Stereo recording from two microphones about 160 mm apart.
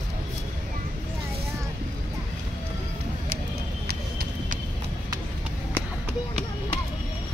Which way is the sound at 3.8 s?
65° right (ahead or behind).